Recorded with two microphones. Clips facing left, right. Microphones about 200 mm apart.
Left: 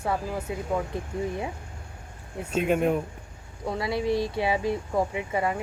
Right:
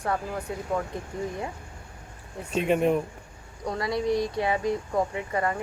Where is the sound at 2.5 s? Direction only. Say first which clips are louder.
Right 1 dB; 5° left (ahead or behind).